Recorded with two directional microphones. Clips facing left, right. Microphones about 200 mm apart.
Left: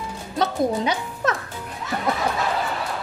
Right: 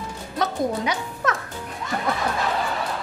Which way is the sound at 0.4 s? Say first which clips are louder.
Left 2 dB; 30° left (ahead or behind).